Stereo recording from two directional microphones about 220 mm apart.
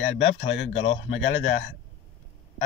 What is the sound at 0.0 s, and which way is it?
Speech, 60° left (ahead or behind).